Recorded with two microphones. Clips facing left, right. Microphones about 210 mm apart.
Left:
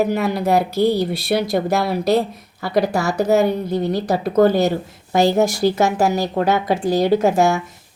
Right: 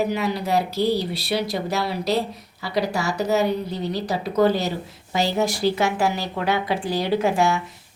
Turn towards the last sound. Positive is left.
turn(degrees=45)  # may be behind; listen again after turning